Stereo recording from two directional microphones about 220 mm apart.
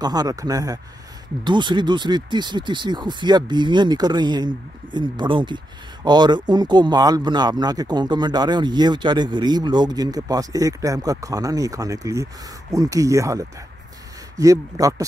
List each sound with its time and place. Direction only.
0.0 s speech: 15° right (ahead or behind)